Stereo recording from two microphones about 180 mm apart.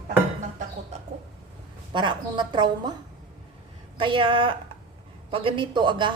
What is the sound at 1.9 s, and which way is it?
A woman's voice, 25° right (ahead or behind).